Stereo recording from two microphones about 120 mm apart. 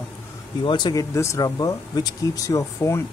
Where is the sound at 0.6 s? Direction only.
40° left (ahead or behind).